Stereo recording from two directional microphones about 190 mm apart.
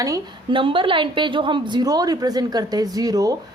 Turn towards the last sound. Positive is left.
turn(degrees=-20)  # may be behind; listen again after turning